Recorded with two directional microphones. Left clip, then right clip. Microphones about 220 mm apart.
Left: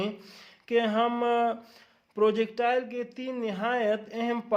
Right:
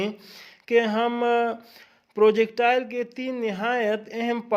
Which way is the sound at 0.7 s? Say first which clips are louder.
Right 4 dB; 30° right (ahead or behind).